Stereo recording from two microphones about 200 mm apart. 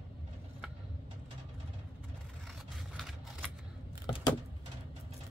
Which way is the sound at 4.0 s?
25° left (ahead or behind).